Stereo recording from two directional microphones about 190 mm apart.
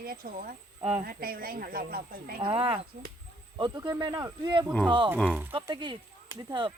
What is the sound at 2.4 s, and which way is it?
Speech, 30° right (ahead or behind).